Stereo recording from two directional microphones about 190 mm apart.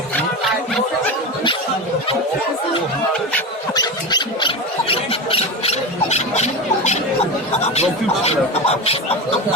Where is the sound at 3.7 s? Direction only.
20° left (ahead or behind).